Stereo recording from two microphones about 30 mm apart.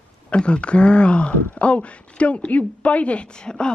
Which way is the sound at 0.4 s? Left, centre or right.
Left.